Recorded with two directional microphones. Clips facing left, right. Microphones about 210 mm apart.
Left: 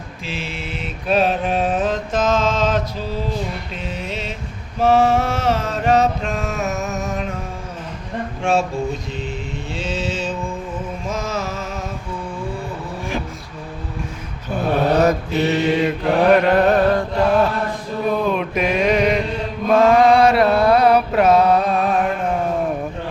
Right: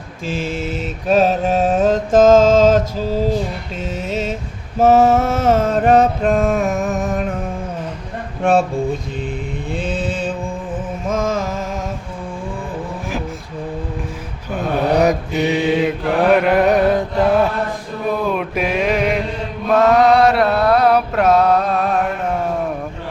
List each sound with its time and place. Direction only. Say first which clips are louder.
0.3 s mantra: right 7 dB; 45° right (ahead or behind)
3.8 s a sound: right 7 dB; 45° right (ahead or behind)
4.8 s mantra: right 3 dB; 45° right (ahead or behind)
9.7 s mantra: right 2 dB; 55° right (ahead or behind)
11.1 s music: right 6 dB; 50° right (ahead or behind)
14.8 s mantra: right 3 dB; 15° right (ahead or behind)
18.3 s mantra: even; 5° right (ahead or behind)